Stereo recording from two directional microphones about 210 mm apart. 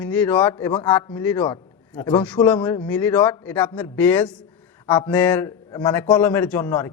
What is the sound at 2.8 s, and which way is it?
A man's voice, 10° left (ahead or behind).